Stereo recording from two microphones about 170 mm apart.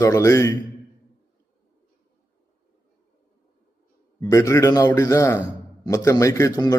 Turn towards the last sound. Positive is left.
turn(degrees=20)  # may be behind; listen again after turning